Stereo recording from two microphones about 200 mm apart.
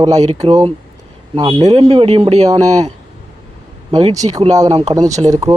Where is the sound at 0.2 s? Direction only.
30° right (ahead or behind).